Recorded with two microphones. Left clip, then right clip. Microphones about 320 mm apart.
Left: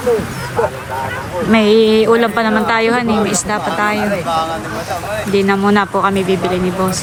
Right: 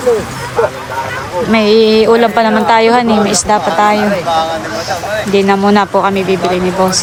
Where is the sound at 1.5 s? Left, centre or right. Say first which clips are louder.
Right 2 dB; centre.